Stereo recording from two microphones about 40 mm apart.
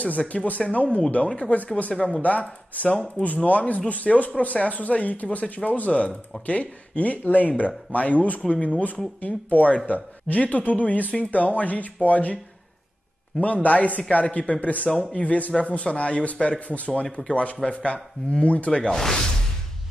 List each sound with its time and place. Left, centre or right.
0.0 s speech: left
1.9 s speech: centre
2.2 s speech: left
13.4 s speech: left
14.2 s speech: left
14.5 s speech: left
18.8 s speech: centre